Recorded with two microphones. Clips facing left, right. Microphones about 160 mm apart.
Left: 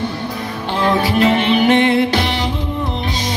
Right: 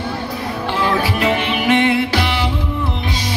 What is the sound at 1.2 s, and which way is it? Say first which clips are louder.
Music: left 4 dB; 35° left (ahead or behind).